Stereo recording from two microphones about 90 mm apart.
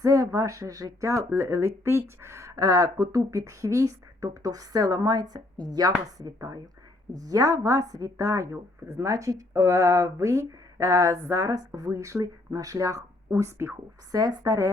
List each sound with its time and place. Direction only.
0.0 s speech: 35° right (ahead or behind)